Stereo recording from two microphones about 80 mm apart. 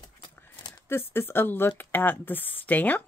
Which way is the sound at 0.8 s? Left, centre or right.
Left.